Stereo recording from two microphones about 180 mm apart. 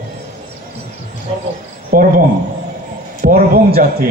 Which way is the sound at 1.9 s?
55° right (ahead or behind).